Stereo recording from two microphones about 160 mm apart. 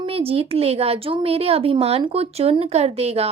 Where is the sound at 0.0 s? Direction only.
35° right (ahead or behind).